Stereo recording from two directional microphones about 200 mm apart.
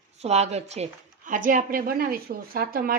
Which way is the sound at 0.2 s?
35° right (ahead or behind).